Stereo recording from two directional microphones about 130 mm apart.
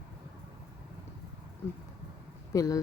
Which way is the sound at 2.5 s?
25° left (ahead or behind).